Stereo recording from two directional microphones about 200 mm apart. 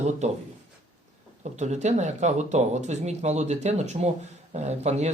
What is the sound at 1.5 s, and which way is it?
Speech, 35° right (ahead or behind).